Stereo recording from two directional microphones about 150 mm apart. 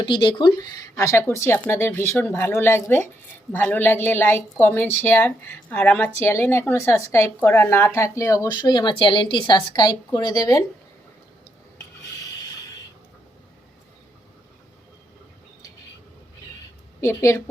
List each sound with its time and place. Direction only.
0.0 s speech: 35° left (ahead or behind)
17.0 s speech: 20° left (ahead or behind)